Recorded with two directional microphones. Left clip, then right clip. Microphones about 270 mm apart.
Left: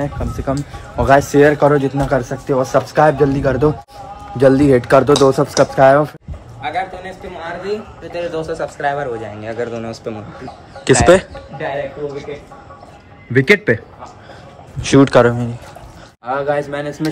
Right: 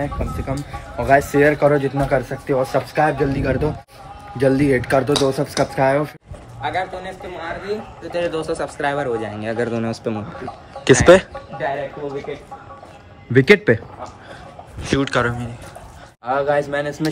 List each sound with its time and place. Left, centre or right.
0.5 s speech: centre
6.6 s a man's voice: centre
8.2 s speech: right
10.8 s speech: centre
13.4 s speech: centre
14.8 s speech: left
16.3 s speech: centre